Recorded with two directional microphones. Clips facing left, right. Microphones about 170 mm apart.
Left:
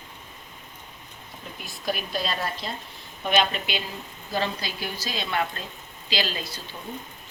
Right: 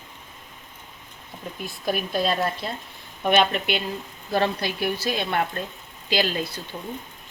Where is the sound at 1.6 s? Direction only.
50° right (ahead or behind).